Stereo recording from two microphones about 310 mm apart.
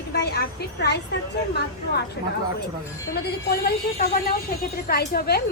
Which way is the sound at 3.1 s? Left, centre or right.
Left.